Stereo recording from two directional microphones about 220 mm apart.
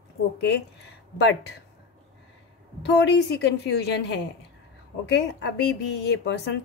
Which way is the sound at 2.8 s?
50° left (ahead or behind).